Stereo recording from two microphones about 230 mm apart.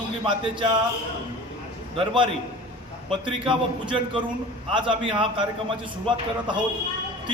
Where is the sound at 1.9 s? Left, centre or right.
Right.